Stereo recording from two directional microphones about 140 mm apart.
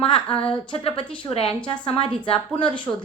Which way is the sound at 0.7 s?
40° left (ahead or behind).